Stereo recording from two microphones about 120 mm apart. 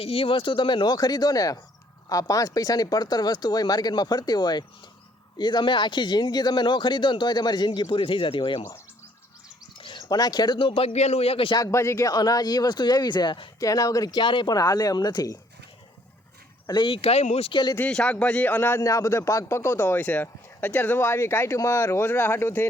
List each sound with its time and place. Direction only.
0.0 s speech: 50° left (ahead or behind)
9.7 s speech: 40° left (ahead or behind)
11.5 s speech: 25° left (ahead or behind)
12.1 s speech: 35° left (ahead or behind)
13.6 s speech: 30° left (ahead or behind)
16.6 s speech: 45° left (ahead or behind); by 17.5 s 60° left (ahead or behind)
17.5 s speech: 35° left (ahead or behind)
17.7 s speech: 10° left (ahead or behind)